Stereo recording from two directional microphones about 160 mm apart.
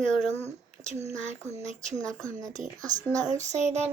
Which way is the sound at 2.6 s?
50° right (ahead or behind).